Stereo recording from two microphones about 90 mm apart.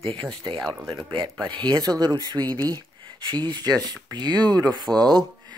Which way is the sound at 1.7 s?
45° right (ahead or behind).